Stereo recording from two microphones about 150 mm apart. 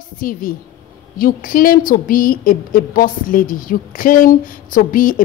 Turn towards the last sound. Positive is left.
turn(degrees=65)  # may be behind; listen again after turning